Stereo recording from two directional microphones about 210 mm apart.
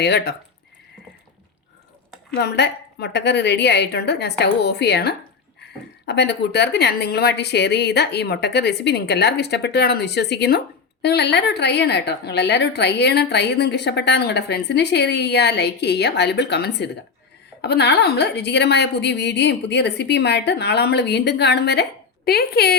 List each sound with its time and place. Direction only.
0.0 s a woman's voice: 50° left (ahead or behind)
2.3 s a woman's voice: 50° left (ahead or behind)